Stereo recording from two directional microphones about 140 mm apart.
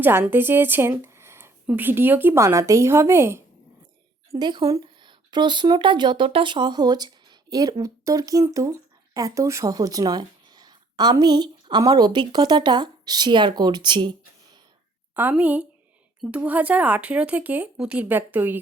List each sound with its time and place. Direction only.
0.0 s speech: 15° right (ahead or behind)
4.4 s speech: 30° right (ahead or behind)
15.1 s speech: 15° right (ahead or behind)